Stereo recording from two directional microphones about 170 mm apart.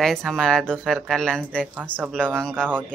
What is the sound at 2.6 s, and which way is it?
Speech, 10° right (ahead or behind).